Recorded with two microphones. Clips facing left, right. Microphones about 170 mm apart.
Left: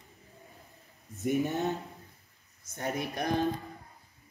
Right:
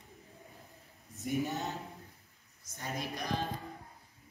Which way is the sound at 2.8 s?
60° left (ahead or behind).